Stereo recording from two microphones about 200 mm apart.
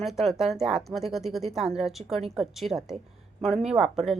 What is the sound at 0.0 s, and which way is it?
Speech, centre (ahead or behind).